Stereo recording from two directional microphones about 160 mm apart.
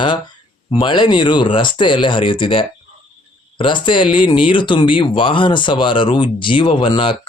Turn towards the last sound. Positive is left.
turn(degrees=30)  # may be behind; listen again after turning